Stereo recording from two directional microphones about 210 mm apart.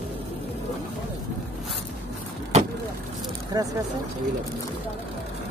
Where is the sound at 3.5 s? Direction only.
15° right (ahead or behind).